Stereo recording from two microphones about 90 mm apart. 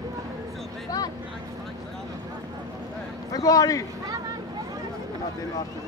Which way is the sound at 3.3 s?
40° left (ahead or behind).